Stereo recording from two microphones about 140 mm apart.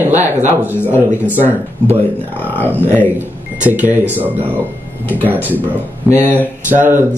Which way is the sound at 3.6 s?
10° right (ahead or behind).